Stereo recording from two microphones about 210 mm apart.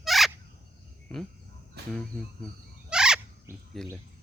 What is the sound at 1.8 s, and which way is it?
Speech, 50° right (ahead or behind).